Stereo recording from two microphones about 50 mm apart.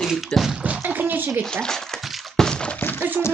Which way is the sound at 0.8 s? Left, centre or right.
Right.